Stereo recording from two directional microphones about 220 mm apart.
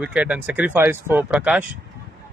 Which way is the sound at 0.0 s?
5° right (ahead or behind).